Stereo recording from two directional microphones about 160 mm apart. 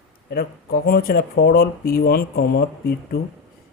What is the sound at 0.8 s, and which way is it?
Speech, 75° left (ahead or behind).